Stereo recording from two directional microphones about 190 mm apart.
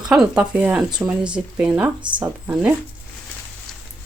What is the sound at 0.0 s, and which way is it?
Speech, 5° right (ahead or behind).